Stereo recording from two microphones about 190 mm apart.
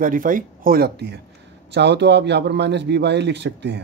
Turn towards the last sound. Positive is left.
turn(degrees=-65)  # may be behind; listen again after turning